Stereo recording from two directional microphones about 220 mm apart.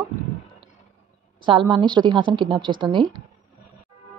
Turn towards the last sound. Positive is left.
turn(degrees=-20)  # may be behind; listen again after turning